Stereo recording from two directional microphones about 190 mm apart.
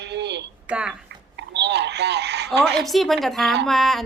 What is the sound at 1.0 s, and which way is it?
Speech, 65° right (ahead or behind).